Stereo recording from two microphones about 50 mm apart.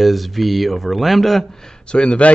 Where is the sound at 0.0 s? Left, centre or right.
Centre.